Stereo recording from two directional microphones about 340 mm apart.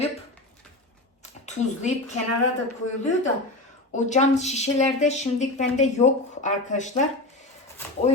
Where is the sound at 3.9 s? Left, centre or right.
Centre.